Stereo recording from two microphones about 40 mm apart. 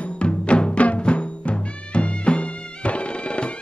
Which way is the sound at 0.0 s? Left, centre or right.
Left.